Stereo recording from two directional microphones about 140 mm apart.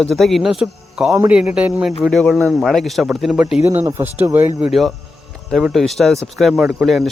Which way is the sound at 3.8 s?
15° right (ahead or behind).